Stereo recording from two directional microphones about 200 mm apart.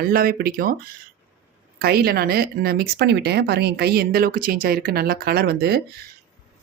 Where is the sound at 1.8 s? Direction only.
50° right (ahead or behind).